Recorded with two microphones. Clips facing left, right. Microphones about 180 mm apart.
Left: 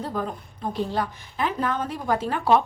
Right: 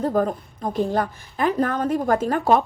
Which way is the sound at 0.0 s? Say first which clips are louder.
Right 8 dB; 45° right (ahead or behind).